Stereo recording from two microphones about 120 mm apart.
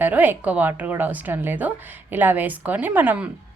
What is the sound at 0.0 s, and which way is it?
A woman's voice, 15° right (ahead or behind).